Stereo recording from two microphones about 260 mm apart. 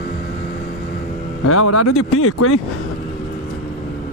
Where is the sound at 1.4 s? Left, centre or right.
Left.